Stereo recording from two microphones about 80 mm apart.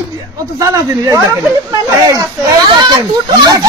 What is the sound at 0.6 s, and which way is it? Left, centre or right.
Speech, right.